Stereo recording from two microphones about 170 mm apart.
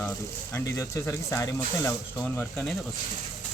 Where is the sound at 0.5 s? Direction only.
15° left (ahead or behind).